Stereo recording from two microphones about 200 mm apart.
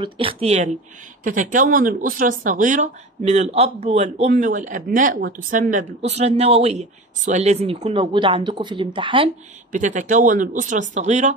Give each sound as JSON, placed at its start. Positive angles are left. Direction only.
{"t": 0.0, "sound": "speech", "side_deg": -25}
{"t": 9.7, "sound": "speech", "side_deg": -40}